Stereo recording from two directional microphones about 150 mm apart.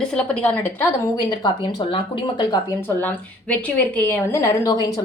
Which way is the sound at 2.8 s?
10° left (ahead or behind).